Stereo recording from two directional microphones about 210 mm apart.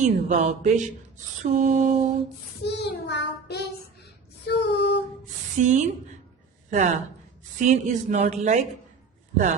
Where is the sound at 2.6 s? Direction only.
50° left (ahead or behind).